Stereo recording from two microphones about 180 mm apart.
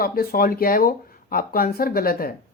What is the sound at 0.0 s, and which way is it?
Speech, 55° left (ahead or behind).